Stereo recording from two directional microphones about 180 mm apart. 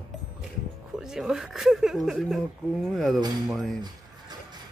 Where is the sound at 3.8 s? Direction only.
25° right (ahead or behind).